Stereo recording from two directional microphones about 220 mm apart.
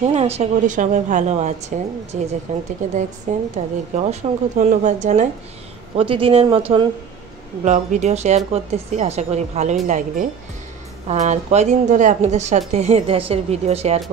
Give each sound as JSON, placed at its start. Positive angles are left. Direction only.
{"t": 0.0, "sound": "a woman's voice", "side_deg": -30}